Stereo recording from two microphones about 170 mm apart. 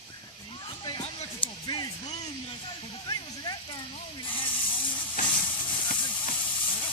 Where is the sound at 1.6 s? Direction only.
25° left (ahead or behind).